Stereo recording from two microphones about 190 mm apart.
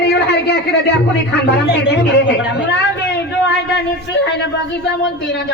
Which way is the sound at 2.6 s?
65° left (ahead or behind).